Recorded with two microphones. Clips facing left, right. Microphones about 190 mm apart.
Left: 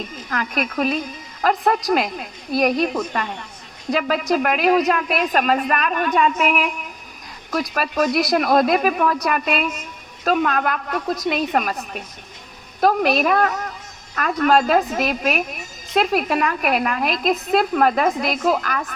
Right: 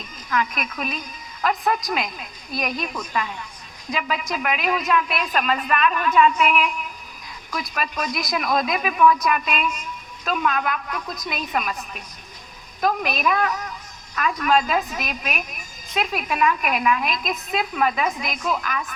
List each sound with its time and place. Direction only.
0.3 s a woman's voice: 50° left (ahead or behind)
3.1 s a woman's voice: 60° left (ahead or behind)
3.9 s a woman's voice: 45° left (ahead or behind)